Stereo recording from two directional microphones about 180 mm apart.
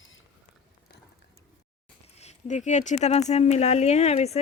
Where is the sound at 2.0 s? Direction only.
35° left (ahead or behind).